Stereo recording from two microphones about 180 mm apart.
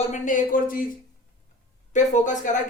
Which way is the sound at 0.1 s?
50° left (ahead or behind).